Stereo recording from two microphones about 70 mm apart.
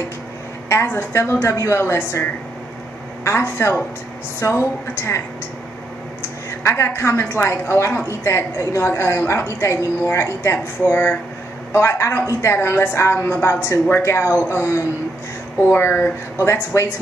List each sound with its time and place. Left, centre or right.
0.7 s a woman's voice: left
1.5 s a woman's voice: left
1.8 s a woman's voice: left
3.3 s a woman's voice: left
6.6 s a woman's voice: left